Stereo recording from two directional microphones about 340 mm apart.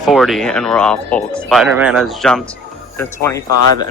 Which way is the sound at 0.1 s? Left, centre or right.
Centre.